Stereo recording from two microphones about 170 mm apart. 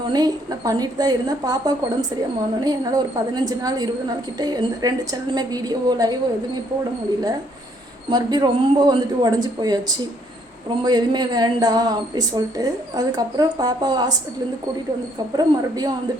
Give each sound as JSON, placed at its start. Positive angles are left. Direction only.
{"t": 0.1, "sound": "speech", "side_deg": -25}
{"t": 8.1, "sound": "speech", "side_deg": -25}
{"t": 10.8, "sound": "speech", "side_deg": -25}
{"t": 15.4, "sound": "speech", "side_deg": -20}